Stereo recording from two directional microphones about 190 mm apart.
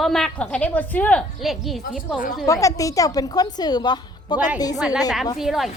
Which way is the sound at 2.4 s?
15° left (ahead or behind).